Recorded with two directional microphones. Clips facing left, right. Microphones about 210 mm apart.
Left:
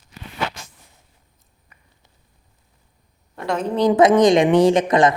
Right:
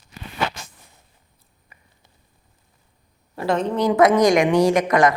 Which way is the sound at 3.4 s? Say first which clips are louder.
Right 2 dB; 5° right (ahead or behind).